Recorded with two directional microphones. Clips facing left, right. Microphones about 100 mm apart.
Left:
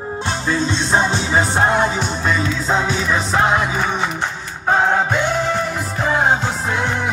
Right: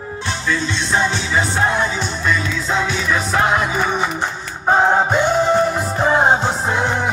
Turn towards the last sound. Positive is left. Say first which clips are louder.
# right 2 dB
turn(degrees=-25)  # may be behind; listen again after turning